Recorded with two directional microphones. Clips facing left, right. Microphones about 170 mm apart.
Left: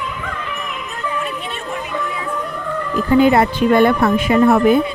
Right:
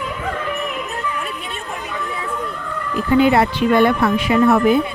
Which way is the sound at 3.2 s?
45° left (ahead or behind).